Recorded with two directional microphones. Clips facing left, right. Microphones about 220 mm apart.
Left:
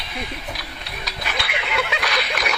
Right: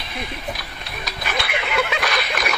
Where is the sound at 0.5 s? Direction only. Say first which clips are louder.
Even; 50° right (ahead or behind).